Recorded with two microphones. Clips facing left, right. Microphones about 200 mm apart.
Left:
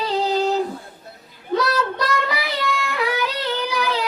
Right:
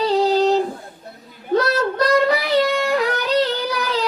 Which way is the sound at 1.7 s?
40° right (ahead or behind).